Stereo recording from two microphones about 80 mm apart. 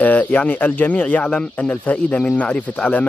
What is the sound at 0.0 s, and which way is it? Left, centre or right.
Speech, centre.